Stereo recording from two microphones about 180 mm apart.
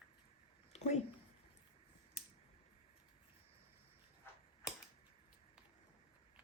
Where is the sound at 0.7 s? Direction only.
40° left (ahead or behind).